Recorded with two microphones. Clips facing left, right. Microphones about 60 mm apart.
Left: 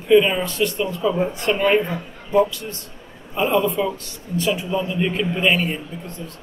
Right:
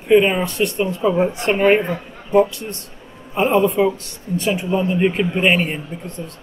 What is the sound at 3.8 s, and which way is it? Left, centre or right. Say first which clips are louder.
A man's voice: right 5 dB; right.